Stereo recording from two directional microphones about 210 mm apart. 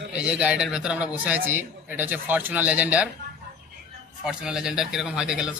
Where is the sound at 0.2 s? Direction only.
5° right (ahead or behind).